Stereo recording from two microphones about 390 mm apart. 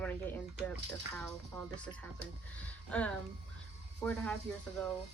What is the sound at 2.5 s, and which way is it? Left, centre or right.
Speech, centre.